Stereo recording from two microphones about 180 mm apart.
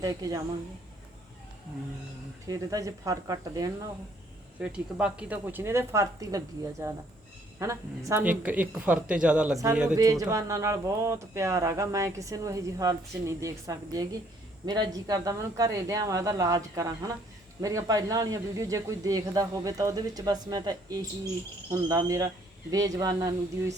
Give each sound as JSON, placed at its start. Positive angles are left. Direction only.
{"t": 0.0, "sound": "speech", "side_deg": -20}
{"t": 2.5, "sound": "speech", "side_deg": -20}
{"t": 4.6, "sound": "speech", "side_deg": -5}
{"t": 10.0, "sound": "speech", "side_deg": -20}